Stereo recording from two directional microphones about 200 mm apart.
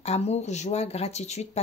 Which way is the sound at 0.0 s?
30° left (ahead or behind).